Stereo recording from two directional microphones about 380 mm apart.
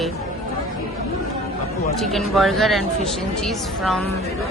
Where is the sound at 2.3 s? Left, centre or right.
Centre.